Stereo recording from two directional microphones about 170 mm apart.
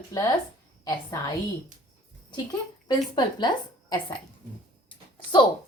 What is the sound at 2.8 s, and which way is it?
A woman's voice, 25° left (ahead or behind).